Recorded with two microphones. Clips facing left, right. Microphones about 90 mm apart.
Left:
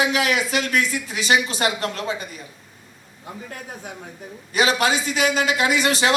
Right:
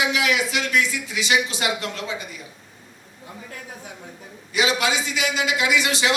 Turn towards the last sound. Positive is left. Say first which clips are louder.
# left 2 dB
turn(degrees=40)  # may be behind; listen again after turning